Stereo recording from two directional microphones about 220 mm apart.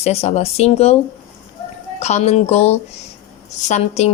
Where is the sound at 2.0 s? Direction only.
30° left (ahead or behind).